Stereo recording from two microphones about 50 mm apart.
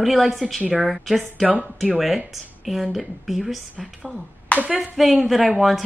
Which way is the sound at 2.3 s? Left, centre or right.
Centre.